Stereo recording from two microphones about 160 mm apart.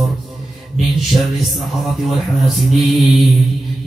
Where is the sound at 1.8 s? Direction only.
Centre (ahead or behind).